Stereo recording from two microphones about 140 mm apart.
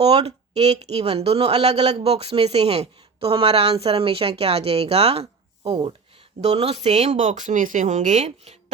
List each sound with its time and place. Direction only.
0.3 s a woman's voice: 50° right (ahead or behind)